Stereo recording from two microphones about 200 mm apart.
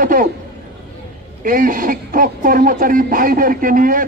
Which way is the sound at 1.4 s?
45° right (ahead or behind).